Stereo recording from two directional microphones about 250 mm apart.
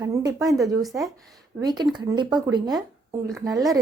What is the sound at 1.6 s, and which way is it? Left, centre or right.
A woman's voice, centre.